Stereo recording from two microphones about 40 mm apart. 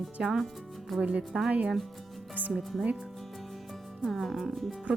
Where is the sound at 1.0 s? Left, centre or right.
Right.